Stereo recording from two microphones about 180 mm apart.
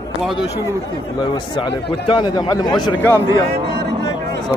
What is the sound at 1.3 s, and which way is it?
A man's voice, 25° left (ahead or behind).